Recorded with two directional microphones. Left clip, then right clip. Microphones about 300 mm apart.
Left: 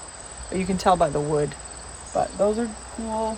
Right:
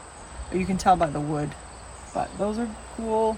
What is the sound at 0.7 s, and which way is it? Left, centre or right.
Speech, centre.